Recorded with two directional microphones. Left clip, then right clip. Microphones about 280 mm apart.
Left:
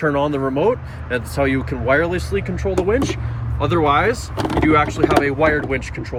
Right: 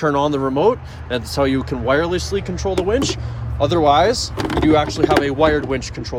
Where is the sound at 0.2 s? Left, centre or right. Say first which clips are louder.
Right 1 dB; centre.